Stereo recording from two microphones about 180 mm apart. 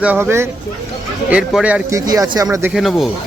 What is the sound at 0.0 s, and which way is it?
Speech, 10° right (ahead or behind).